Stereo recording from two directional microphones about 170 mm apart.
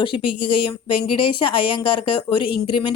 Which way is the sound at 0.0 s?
30° left (ahead or behind).